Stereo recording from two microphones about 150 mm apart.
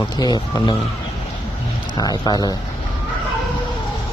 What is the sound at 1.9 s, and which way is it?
Speech, 25° left (ahead or behind).